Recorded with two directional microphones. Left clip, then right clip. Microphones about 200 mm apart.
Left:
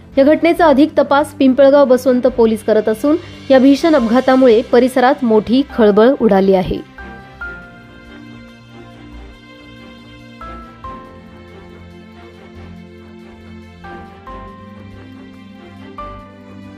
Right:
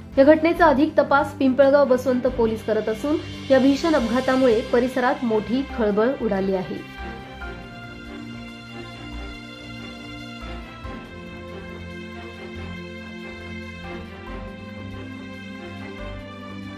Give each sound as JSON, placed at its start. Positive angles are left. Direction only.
{"t": 0.1, "sound": "a woman's voice", "side_deg": 35}